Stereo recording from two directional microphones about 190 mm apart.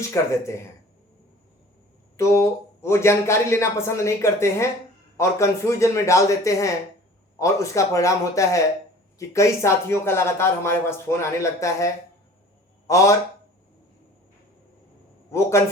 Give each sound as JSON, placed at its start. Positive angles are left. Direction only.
{"t": 0.1, "sound": "speech", "side_deg": 15}
{"t": 2.1, "sound": "speech", "side_deg": 15}
{"t": 12.9, "sound": "speech", "side_deg": 15}
{"t": 15.3, "sound": "speech", "side_deg": 15}